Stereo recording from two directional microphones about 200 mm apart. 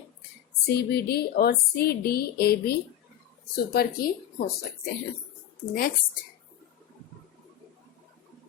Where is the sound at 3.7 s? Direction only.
50° left (ahead or behind).